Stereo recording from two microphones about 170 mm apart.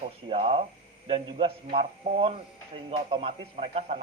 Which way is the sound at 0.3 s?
35° right (ahead or behind).